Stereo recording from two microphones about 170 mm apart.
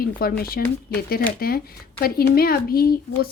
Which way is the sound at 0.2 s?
60° left (ahead or behind).